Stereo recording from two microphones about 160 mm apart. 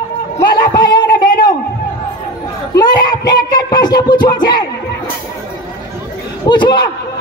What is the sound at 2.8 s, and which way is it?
Music, 25° left (ahead or behind).